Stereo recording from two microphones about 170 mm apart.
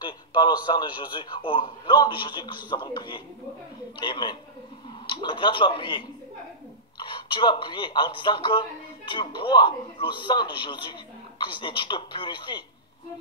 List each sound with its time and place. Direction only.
0.0 s a man's voice: 25° left (ahead or behind)